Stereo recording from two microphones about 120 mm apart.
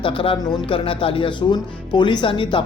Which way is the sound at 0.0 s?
45° left (ahead or behind).